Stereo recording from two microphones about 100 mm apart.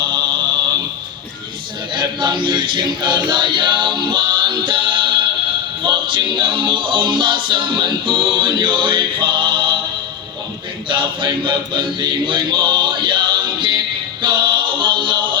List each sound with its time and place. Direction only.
1.9 s choir: 50° right (ahead or behind)
5.8 s music: 50° right (ahead or behind)
10.8 s a sound: 55° right (ahead or behind)
14.2 s music: 50° right (ahead or behind)